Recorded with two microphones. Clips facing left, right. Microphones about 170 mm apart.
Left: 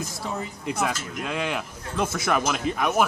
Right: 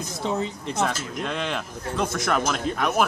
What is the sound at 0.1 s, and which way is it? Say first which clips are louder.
Speech: right 5 dB; 20° right (ahead or behind).